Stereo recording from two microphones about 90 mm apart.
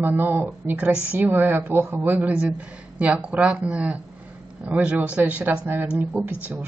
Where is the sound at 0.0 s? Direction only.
25° right (ahead or behind).